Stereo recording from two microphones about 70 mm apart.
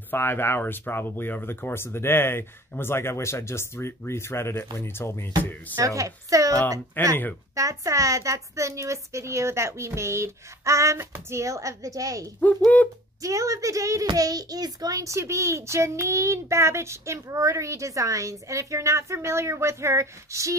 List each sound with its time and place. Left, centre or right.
0.1 s speech: left
5.4 s speech: left
5.8 s a child's voice: right
7.0 s speech: left
7.5 s a child's voice: right
12.4 s speech: centre
13.2 s a child's voice: right
14.0 s a child's voice: right